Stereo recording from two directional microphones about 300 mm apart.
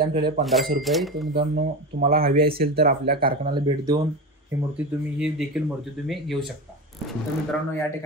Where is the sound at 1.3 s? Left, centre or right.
Right.